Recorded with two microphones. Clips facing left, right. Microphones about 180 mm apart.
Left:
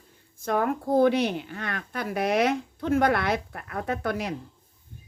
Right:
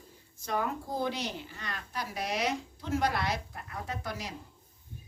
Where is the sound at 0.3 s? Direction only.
55° left (ahead or behind).